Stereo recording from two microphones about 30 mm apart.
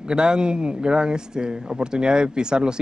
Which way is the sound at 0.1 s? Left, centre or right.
Right.